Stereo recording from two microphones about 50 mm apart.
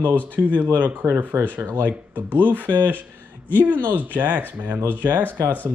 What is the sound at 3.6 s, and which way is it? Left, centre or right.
Speech, right.